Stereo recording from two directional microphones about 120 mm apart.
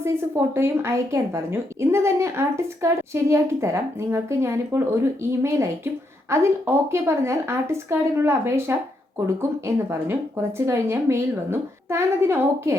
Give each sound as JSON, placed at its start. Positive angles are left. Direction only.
{"t": 0.0, "sound": "speech", "side_deg": -20}